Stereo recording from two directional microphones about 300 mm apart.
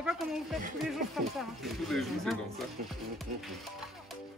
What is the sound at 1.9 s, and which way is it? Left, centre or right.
Speech, centre.